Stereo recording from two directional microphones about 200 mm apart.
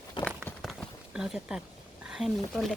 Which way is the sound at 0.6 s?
Centre (ahead or behind).